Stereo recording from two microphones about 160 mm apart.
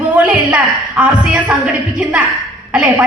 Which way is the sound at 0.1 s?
10° right (ahead or behind).